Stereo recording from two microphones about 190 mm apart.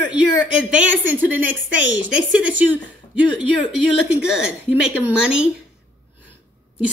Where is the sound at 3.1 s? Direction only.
5° right (ahead or behind).